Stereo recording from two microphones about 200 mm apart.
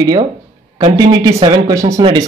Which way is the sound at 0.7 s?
20° right (ahead or behind).